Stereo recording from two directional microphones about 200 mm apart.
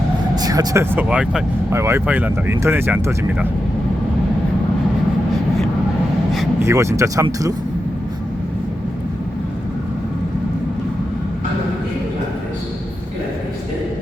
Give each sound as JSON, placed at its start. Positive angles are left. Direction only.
{"t": 0.3, "sound": "speech", "side_deg": -20}
{"t": 6.6, "sound": "speech", "side_deg": -15}